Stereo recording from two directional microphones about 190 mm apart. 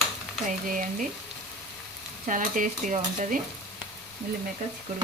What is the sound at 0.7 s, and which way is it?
Stir, 45° right (ahead or behind).